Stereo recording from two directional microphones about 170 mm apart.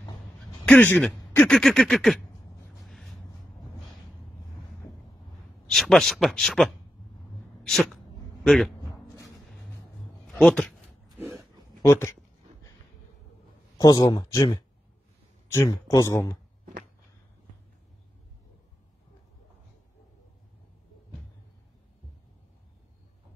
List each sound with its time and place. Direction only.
0.7 s speech: 10° left (ahead or behind)
2.8 s a sound: centre (ahead or behind)
5.7 s speech: centre (ahead or behind)
10.2 s a sound: 5° left (ahead or behind)
11.9 s speech: 15° left (ahead or behind)
13.7 s speech: 20° left (ahead or behind)